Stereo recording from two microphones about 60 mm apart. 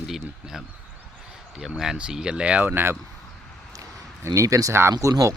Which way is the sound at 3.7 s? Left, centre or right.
Right.